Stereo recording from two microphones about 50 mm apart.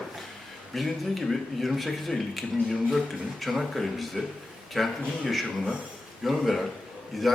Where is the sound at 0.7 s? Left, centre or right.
Centre.